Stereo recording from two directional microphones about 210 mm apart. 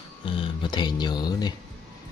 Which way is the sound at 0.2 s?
20° left (ahead or behind).